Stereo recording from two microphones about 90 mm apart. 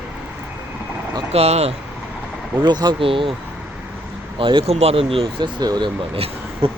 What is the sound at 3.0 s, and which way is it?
Speech, 80° right.